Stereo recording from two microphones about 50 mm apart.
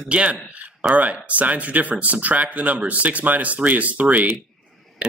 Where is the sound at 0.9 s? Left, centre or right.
Right.